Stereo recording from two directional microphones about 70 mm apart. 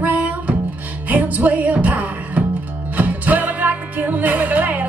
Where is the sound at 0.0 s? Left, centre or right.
Right.